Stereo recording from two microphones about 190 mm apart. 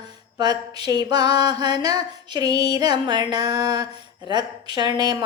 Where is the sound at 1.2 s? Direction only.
60° left (ahead or behind).